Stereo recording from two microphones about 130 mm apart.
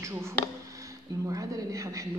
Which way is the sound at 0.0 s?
20° right (ahead or behind).